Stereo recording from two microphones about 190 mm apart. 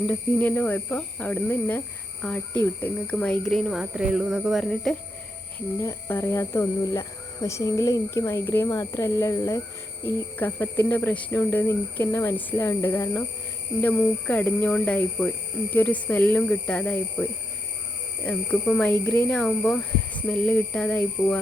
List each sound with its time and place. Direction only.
0.1 s speech: 10° left (ahead or behind)
5.7 s speech: 15° left (ahead or behind)